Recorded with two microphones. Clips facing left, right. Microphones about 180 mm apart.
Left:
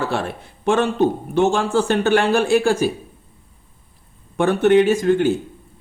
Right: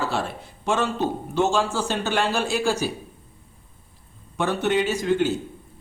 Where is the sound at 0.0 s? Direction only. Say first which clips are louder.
Left 3 dB; 60° left (ahead or behind).